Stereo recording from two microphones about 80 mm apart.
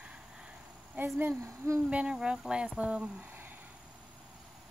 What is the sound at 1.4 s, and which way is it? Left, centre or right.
Speech, right.